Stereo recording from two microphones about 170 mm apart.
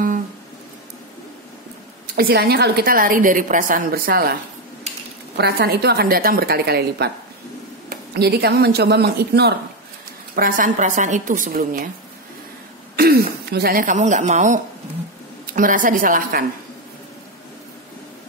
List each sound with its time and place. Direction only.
2.1 s a woman's voice: 65° right (ahead or behind)
5.4 s a woman's voice: 70° right (ahead or behind)
10.3 s speech: 55° right (ahead or behind)
12.9 s speech: 65° right (ahead or behind)